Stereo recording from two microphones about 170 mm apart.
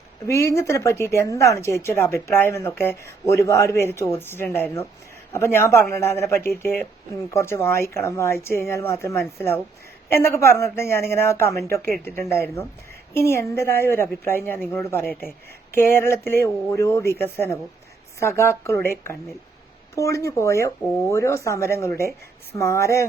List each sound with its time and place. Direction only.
0.3 s speech: 15° left (ahead or behind)
20.8 s speech: centre (ahead or behind)
21.1 s speech: 15° left (ahead or behind)